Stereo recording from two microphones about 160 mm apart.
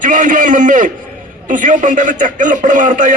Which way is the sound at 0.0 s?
55° right (ahead or behind).